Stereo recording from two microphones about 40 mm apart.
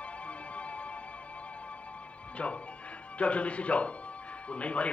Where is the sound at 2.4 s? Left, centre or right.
Left.